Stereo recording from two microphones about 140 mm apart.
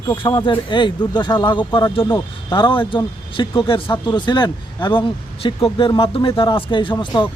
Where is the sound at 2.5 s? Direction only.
35° left (ahead or behind).